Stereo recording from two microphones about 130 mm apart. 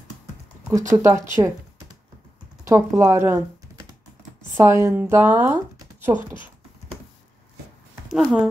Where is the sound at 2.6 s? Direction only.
25° right (ahead or behind).